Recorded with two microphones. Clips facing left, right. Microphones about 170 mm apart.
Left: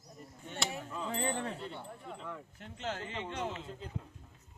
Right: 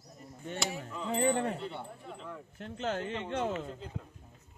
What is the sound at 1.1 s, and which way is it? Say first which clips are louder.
Speech: right 8 dB; 60° right (ahead or behind).